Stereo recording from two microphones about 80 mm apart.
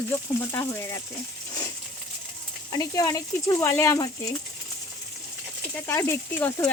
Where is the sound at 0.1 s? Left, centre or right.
Left.